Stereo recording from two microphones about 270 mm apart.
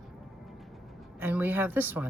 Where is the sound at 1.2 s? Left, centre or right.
Centre.